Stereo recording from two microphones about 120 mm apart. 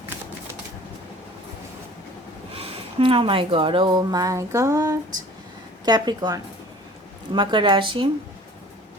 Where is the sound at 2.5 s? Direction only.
50° right (ahead or behind).